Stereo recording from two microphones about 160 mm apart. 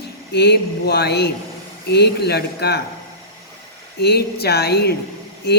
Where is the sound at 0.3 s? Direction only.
90° left.